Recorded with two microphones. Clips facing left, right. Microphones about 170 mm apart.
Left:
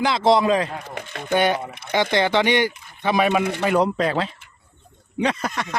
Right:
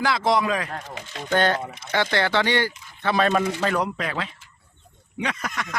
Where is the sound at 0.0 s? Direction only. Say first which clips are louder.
Left 4 dB; 25° left (ahead or behind).